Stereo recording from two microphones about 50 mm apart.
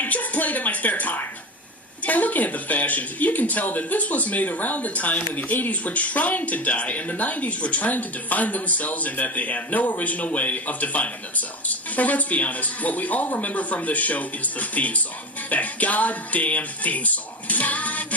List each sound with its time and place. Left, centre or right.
0.0 s music: left
2.0 s speech: left